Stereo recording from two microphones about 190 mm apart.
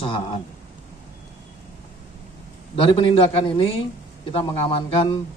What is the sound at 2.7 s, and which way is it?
A man's voice, 30° left (ahead or behind).